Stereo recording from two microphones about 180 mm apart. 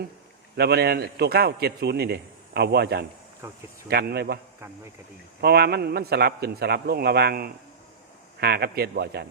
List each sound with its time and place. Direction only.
0.5 s a man's voice: 65° right (ahead or behind)
5.4 s a man's voice: 65° right (ahead or behind)